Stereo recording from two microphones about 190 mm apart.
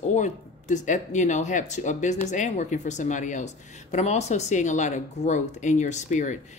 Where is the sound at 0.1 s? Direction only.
40° left (ahead or behind).